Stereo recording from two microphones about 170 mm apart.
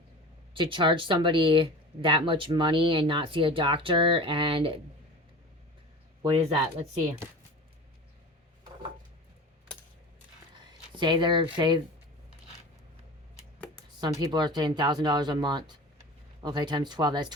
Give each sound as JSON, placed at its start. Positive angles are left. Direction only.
{"t": 0.5, "sound": "speech", "side_deg": -30}
{"t": 6.2, "sound": "speech", "side_deg": -30}
{"t": 10.6, "sound": "speech", "side_deg": -25}
{"t": 14.0, "sound": "speech", "side_deg": -25}